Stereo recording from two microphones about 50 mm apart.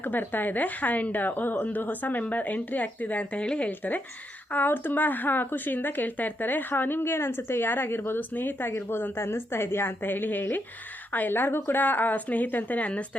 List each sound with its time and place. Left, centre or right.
0.0 s a woman's voice: left
3.7 s a woman's voice: left
11.8 s a woman's voice: left